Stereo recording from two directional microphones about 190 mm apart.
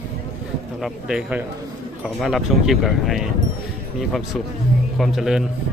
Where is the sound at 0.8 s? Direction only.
Centre (ahead or behind).